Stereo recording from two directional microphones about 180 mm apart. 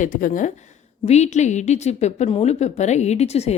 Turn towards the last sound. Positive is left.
turn(degrees=35)  # may be behind; listen again after turning